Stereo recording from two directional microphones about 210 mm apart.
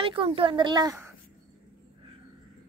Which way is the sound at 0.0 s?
25° right (ahead or behind).